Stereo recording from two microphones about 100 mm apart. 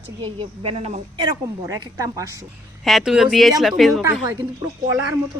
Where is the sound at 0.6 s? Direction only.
75° right (ahead or behind).